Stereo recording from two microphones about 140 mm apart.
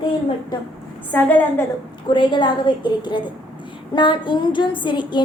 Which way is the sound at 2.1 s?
35° left (ahead or behind).